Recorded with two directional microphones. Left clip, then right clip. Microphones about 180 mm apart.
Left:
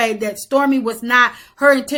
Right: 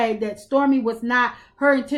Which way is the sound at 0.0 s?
15° left (ahead or behind).